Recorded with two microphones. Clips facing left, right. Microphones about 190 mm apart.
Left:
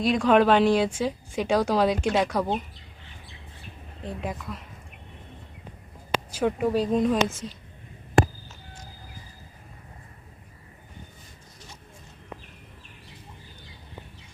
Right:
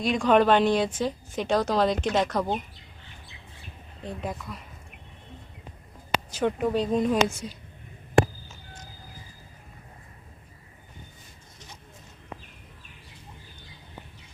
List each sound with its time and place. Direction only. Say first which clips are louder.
0.0 s speech: left 1 dB; centre (ahead or behind)
4.0 s speech: left 1 dB; centre (ahead or behind)
6.3 s speech: left 1 dB; 5° left (ahead or behind)